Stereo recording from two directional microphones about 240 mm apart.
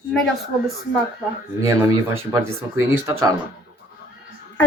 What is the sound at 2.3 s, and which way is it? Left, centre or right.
Speech, centre.